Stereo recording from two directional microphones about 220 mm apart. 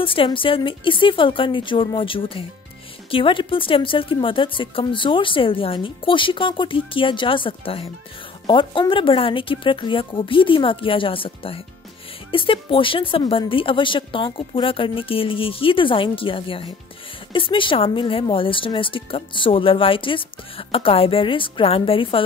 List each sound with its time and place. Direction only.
0.0 s speech: 25° left (ahead or behind)